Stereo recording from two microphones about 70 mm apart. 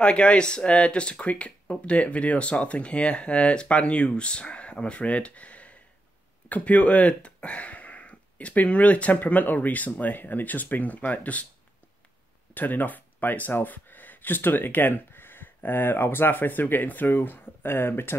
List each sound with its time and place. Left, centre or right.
0.0 s speech: centre
12.5 s speech: left